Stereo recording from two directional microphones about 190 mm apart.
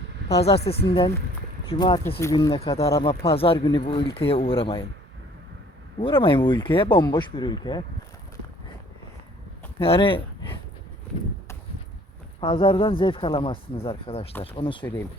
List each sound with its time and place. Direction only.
0.6 s speech: 30° left (ahead or behind)
2.0 s speech: 10° left (ahead or behind)
2.3 s speech: 25° left (ahead or behind)
6.0 s speech: 30° left (ahead or behind)
9.8 s speech: 30° left (ahead or behind)
12.4 s speech: 25° left (ahead or behind)